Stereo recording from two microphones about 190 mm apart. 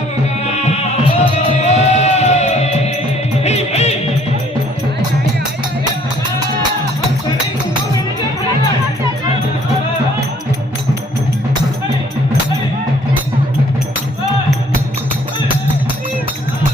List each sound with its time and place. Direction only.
0.4 s music: 35° left (ahead or behind)